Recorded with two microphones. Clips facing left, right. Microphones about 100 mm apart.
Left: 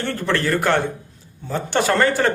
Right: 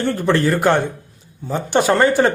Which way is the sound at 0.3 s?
20° right (ahead or behind).